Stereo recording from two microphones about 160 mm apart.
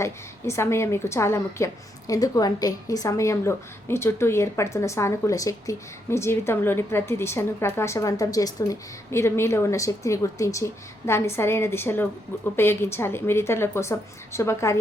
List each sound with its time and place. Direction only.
0.0 s a woman's voice: 15° left (ahead or behind)